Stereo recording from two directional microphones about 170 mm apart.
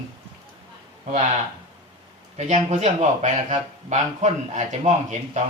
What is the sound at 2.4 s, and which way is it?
Speech, 45° right (ahead or behind).